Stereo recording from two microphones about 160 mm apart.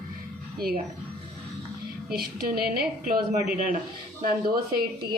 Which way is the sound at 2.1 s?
70° right (ahead or behind).